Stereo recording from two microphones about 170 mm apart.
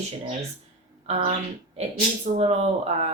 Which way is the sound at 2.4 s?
40° right (ahead or behind).